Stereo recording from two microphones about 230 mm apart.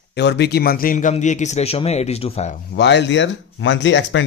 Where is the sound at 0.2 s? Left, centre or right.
Left.